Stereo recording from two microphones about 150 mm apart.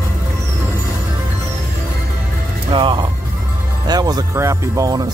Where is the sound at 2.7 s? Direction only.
35° right (ahead or behind).